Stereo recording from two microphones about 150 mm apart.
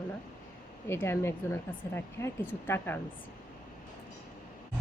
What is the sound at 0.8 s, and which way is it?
A woman's voice, 15° left (ahead or behind).